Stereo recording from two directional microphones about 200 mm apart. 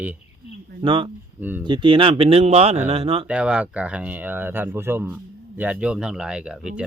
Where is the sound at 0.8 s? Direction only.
25° right (ahead or behind).